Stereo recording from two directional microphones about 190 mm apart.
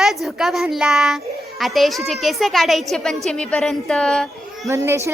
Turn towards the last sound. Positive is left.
turn(degrees=-15)  # may be behind; listen again after turning